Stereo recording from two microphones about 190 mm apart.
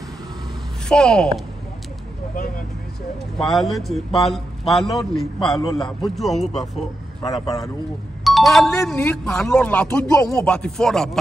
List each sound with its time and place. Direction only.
0.8 s speech: 5° left (ahead or behind)
3.3 s speech: centre (ahead or behind)
7.2 s a man's voice: 20° left (ahead or behind)
8.2 s speech: centre (ahead or behind)